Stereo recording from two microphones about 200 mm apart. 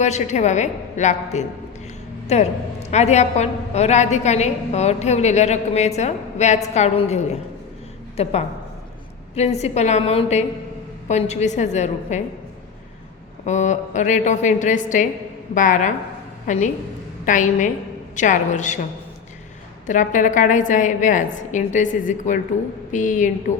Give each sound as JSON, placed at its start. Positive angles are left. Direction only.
{"t": 0.0, "sound": "a woman's voice", "side_deg": 35}
{"t": 13.4, "sound": "a woman's voice", "side_deg": 35}
{"t": 19.9, "sound": "a woman's voice", "side_deg": 40}